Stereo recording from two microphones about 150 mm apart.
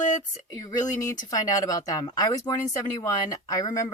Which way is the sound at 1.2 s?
25° left (ahead or behind).